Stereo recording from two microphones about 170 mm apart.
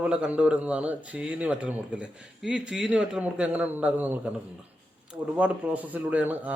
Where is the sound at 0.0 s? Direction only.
5° right (ahead or behind).